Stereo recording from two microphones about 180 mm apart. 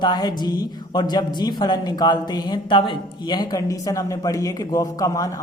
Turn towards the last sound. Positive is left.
turn(degrees=20)  # may be behind; listen again after turning